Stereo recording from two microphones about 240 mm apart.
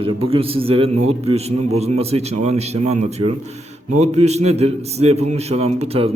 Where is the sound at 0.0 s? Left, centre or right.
Right.